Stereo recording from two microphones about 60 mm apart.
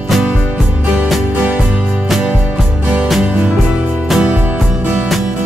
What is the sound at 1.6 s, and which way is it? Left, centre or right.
Music, centre.